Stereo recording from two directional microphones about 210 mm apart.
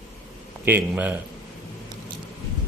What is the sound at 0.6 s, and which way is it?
Speech, 10° right (ahead or behind).